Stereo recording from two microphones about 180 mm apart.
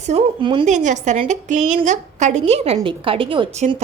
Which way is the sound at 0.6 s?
45° right (ahead or behind).